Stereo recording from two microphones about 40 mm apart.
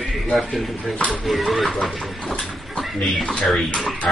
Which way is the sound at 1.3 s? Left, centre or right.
Centre.